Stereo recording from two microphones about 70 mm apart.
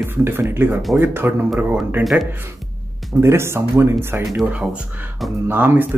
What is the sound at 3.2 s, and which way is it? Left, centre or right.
Speech, right.